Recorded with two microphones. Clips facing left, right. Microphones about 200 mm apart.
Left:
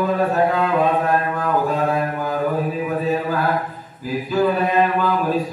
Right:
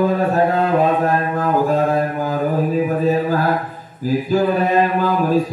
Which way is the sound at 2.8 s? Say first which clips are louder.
Right 4 dB; 40° right (ahead or behind).